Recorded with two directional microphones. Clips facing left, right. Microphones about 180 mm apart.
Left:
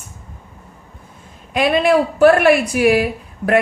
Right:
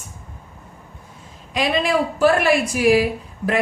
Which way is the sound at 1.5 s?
60° left (ahead or behind).